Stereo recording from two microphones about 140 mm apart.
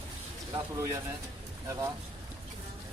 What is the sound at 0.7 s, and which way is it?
Speech, 20° right (ahead or behind).